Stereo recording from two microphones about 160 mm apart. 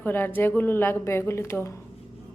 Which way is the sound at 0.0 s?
10° left (ahead or behind).